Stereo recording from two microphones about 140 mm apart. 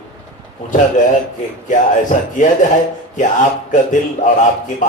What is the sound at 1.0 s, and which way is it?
A man's voice, 65° left (ahead or behind).